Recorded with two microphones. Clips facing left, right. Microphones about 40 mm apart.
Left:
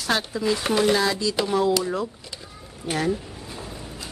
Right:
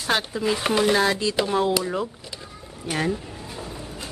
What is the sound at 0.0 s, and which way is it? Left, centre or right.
Speech, centre.